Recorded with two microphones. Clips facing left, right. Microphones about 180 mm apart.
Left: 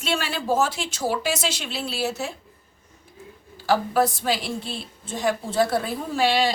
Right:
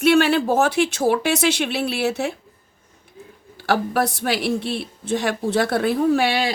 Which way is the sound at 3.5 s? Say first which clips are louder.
Even; 65° right (ahead or behind).